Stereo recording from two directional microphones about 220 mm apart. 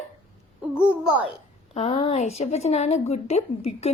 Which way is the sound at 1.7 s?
25° left (ahead or behind).